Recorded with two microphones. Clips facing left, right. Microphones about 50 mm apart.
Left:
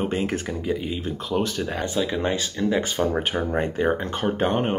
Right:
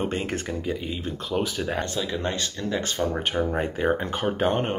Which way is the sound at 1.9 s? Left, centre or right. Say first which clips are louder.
Left 4 dB; centre.